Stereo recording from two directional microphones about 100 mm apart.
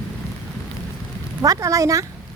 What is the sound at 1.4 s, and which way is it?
Speech, 35° right (ahead or behind).